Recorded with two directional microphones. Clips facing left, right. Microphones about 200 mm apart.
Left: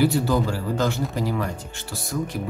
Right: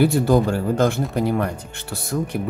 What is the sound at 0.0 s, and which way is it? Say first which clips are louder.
Speech: right 4 dB; 50° right (ahead or behind).